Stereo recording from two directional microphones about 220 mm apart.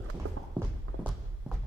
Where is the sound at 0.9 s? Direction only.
75° right (ahead or behind).